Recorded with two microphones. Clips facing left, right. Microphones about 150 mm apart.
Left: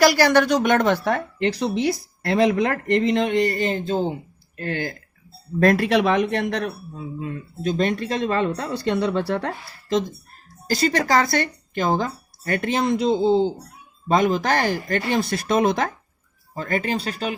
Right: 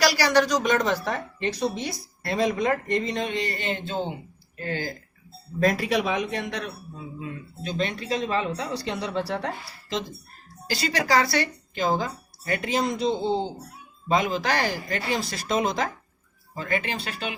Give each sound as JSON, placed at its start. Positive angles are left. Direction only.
{"t": 0.0, "sound": "speech", "side_deg": 50}
{"t": 4.6, "sound": "speech", "side_deg": 65}
{"t": 7.2, "sound": "speech", "side_deg": 45}
{"t": 10.7, "sound": "speech", "side_deg": 45}
{"t": 14.1, "sound": "speech", "side_deg": 50}
{"t": 16.6, "sound": "speech", "side_deg": 40}